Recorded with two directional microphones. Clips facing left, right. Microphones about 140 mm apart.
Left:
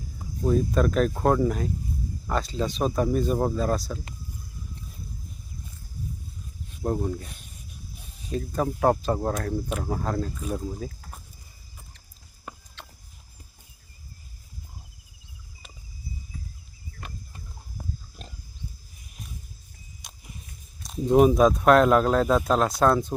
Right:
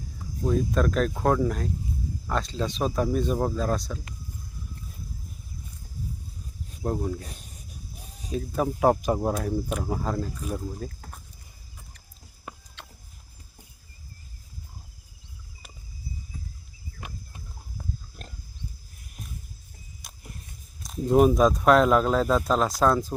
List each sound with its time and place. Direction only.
0.4 s speech: 5° left (ahead or behind)
6.8 s speech: centre (ahead or behind)
7.3 s snake: 40° right (ahead or behind)
8.3 s speech: centre (ahead or behind)
12.5 s vehicle: 5° right (ahead or behind)
18.2 s pig: 5° right (ahead or behind)
20.0 s vehicle: centre (ahead or behind)
20.8 s speech: centre (ahead or behind)